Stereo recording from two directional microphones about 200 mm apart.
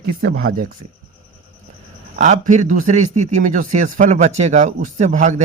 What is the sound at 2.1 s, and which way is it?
A man's voice, 40° right (ahead or behind).